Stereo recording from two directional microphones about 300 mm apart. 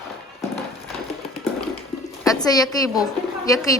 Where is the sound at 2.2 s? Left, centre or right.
Centre.